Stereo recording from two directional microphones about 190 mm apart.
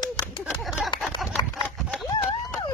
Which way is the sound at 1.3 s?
10° left (ahead or behind).